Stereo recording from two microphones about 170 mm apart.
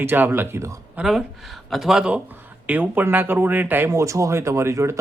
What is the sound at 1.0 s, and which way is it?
Speech, centre (ahead or behind).